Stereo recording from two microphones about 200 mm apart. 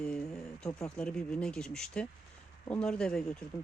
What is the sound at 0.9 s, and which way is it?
Speech, 5° left (ahead or behind).